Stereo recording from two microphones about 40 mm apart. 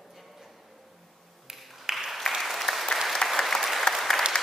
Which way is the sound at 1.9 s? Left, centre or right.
Centre.